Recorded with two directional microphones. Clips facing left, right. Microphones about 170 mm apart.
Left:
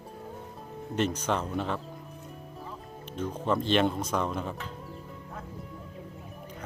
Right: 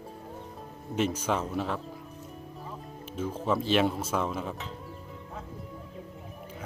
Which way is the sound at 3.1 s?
5° right (ahead or behind).